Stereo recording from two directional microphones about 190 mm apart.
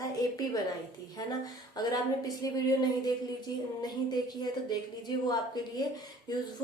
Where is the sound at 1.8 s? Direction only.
20° left (ahead or behind).